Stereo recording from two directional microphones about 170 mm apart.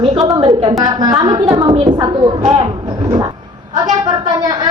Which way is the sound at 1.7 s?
40° right (ahead or behind).